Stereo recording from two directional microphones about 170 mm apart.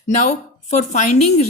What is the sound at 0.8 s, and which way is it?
Speech, 40° left (ahead or behind).